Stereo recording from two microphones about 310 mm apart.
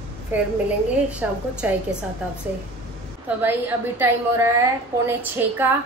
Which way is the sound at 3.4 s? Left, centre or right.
Centre.